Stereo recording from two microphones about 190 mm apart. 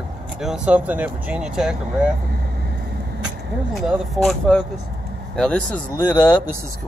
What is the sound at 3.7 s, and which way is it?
Speech, centre (ahead or behind).